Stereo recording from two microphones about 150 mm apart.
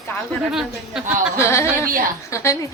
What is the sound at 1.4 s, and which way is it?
A woman's voice, 20° left (ahead or behind).